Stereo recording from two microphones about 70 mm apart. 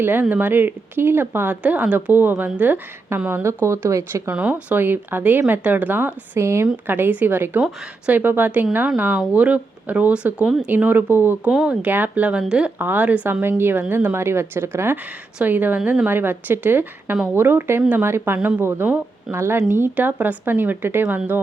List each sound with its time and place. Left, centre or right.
0.0 s speech: right
1.6 s speech: centre
3.4 s speech: right
4.3 s speech: centre
4.8 s speech: right
6.4 s speech: right
6.8 s speech: right
10.7 s speech: right
11.5 s speech: centre
11.8 s speech: right
12.8 s speech: right
19.8 s speech: right